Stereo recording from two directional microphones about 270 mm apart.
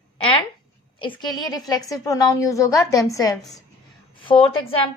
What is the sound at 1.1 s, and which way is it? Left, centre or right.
A woman's voice, centre.